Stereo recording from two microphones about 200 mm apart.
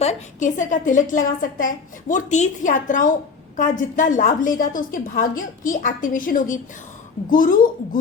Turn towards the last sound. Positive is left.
turn(degrees=45)  # may be behind; listen again after turning